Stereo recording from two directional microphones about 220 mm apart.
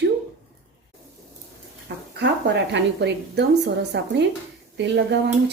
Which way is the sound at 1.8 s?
55° right (ahead or behind).